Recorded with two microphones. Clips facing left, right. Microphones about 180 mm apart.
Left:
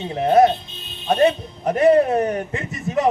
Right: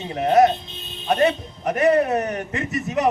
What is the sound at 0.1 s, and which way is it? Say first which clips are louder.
Speech: left 1 dB; 30° left (ahead or behind).